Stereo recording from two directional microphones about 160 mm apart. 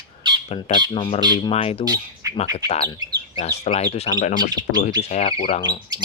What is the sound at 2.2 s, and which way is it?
Bird, 20° right (ahead or behind).